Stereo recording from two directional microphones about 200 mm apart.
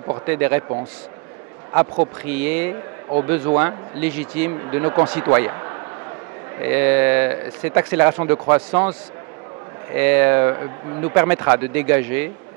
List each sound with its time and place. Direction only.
0.3 s speech: 10° right (ahead or behind)
2.2 s speech: 10° right (ahead or behind)
9.9 s speech: 10° right (ahead or behind)